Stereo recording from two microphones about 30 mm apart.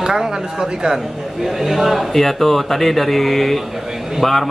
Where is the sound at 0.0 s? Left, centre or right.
Centre.